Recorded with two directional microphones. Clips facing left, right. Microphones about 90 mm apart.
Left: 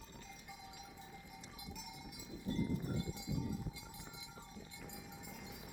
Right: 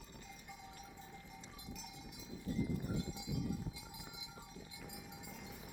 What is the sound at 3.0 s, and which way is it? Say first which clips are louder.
Cowbell: even; 15° right (ahead or behind).